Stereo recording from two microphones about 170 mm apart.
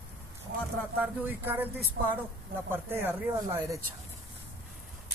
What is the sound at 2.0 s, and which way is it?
Speech, 90° right.